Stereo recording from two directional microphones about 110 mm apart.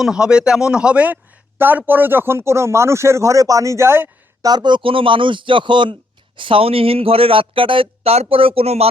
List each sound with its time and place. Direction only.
0.0 s speech: 5° right (ahead or behind); by 4.1 s 20° right (ahead or behind)
4.4 s a man's voice: 40° right (ahead or behind); by 8.9 s 65° right (ahead or behind)